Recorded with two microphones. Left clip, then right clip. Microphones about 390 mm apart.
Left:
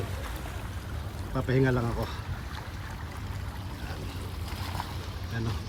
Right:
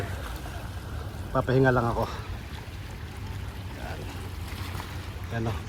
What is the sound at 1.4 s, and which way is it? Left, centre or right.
Speech, right.